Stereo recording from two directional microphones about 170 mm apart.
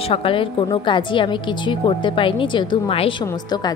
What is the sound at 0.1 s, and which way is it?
A woman's voice, 30° left (ahead or behind).